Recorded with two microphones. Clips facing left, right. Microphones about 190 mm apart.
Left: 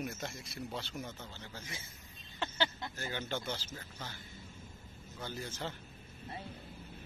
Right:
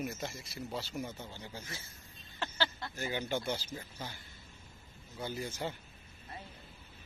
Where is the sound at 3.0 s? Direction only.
15° right (ahead or behind).